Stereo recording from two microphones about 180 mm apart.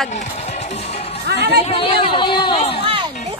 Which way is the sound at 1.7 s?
30° left (ahead or behind).